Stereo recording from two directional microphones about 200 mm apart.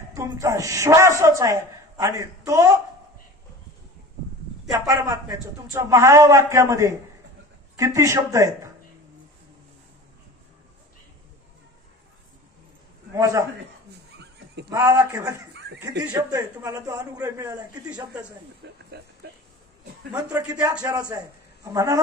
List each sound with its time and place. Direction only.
0.1 s a man's voice: 15° right (ahead or behind)
4.7 s a man's voice: 15° right (ahead or behind)
13.1 s a man's voice: 15° right (ahead or behind)
14.1 s goat: 60° right (ahead or behind)
14.7 s a man's voice: 15° right (ahead or behind)
18.6 s speech: 60° right (ahead or behind)
20.1 s a man's voice: 20° right (ahead or behind)